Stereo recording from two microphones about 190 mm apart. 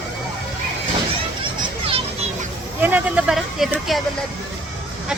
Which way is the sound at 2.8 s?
10° right (ahead or behind).